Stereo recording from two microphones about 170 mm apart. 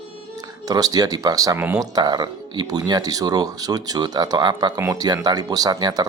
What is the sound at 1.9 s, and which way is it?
Speech, 25° right (ahead or behind).